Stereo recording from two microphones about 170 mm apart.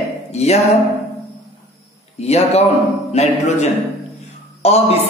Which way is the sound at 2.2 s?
40° left (ahead or behind).